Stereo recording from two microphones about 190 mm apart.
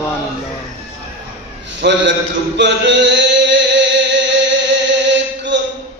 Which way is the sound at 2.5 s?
70° right (ahead or behind).